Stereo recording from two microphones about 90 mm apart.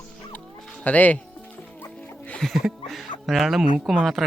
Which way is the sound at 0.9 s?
15° left (ahead or behind).